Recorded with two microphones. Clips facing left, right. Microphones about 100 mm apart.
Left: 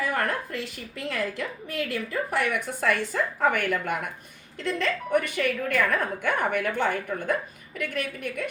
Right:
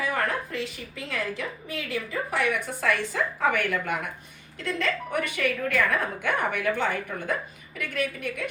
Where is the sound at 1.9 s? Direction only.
55° left (ahead or behind).